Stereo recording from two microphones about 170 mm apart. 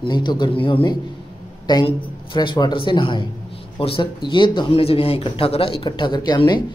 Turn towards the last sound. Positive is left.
turn(degrees=25)  # may be behind; listen again after turning